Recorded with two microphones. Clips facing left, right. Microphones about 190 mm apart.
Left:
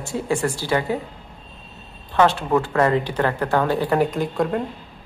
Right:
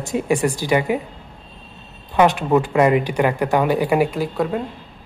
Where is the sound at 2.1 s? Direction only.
15° right (ahead or behind).